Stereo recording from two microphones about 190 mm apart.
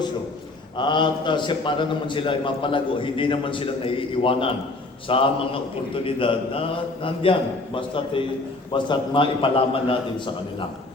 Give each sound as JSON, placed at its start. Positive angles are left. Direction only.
{"t": 0.8, "sound": "a man's voice", "side_deg": 25}